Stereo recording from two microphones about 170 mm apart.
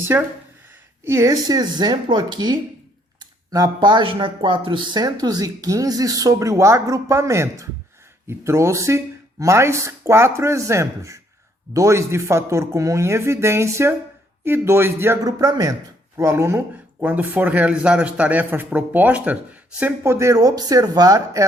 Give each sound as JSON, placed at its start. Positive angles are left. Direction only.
{"t": 0.1, "sound": "speech", "side_deg": -15}